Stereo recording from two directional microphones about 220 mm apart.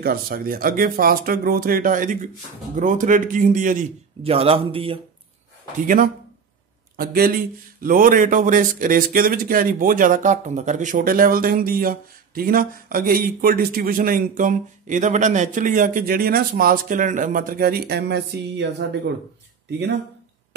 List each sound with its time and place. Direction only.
0.0 s speech: 40° right (ahead or behind); by 5.0 s 25° right (ahead or behind)
7.0 s speech: 40° right (ahead or behind)